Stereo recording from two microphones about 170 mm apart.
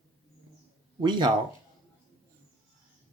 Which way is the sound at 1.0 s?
25° right (ahead or behind).